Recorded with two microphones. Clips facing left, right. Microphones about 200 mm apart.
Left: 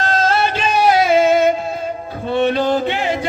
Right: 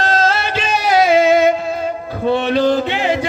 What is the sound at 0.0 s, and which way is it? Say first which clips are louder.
Music: even; 50° left (ahead or behind).